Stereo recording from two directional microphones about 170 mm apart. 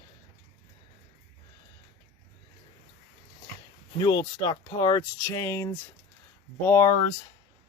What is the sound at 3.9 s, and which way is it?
Speech, 25° left (ahead or behind).